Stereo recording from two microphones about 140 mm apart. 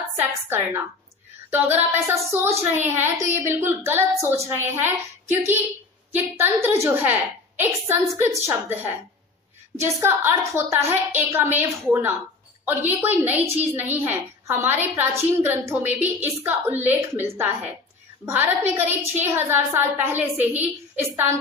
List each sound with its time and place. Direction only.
0.2 s a woman's voice: 15° right (ahead or behind)